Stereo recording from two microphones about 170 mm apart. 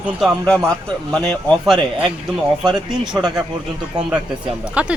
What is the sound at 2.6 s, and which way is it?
Speech, 25° right (ahead or behind).